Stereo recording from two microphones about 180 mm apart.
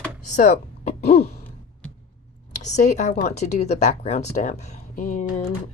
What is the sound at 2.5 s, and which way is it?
Speech, 40° left (ahead or behind).